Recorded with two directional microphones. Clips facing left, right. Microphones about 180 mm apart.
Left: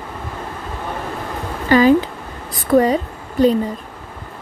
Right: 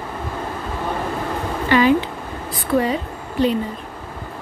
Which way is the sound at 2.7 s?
45° left (ahead or behind).